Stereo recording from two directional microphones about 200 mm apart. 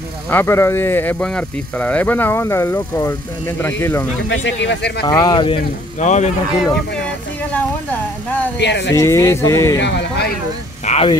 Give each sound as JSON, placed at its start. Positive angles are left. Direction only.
{"t": 0.3, "sound": "speech", "side_deg": 10}
{"t": 4.3, "sound": "speech", "side_deg": 60}
{"t": 5.0, "sound": "speech", "side_deg": 20}
{"t": 5.9, "sound": "speech", "side_deg": 35}
{"t": 7.5, "sound": "speech", "side_deg": 10}
{"t": 8.5, "sound": "speech", "side_deg": 60}
{"t": 8.9, "sound": "speech", "side_deg": 15}
{"t": 9.8, "sound": "speech", "side_deg": 60}
{"t": 10.9, "sound": "a sound", "side_deg": 30}